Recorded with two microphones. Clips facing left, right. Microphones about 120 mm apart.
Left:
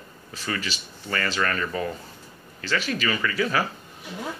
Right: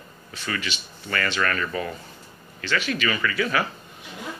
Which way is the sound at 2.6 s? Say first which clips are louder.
Right 1 dB; 35° left (ahead or behind).